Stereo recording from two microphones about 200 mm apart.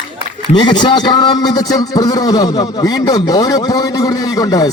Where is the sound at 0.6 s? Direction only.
20° left (ahead or behind).